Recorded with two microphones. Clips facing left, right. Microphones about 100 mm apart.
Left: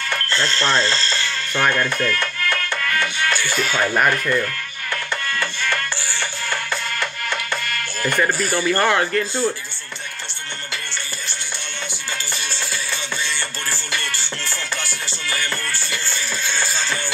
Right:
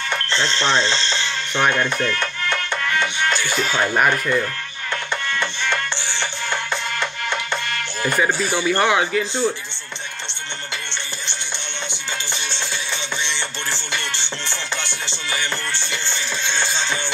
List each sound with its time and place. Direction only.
0.5 s mechanisms: 20° right (ahead or behind)
3.4 s speech: 20° right (ahead or behind)
3.8 s speech: 10° right (ahead or behind)
5.4 s music: 20° right (ahead or behind)
8.0 s speech: 5° right (ahead or behind)
9.2 s speech: 5° left (ahead or behind)
12.9 s music: 20° right (ahead or behind)
14.8 s music: 10° left (ahead or behind)
15.2 s music: 20° right (ahead or behind)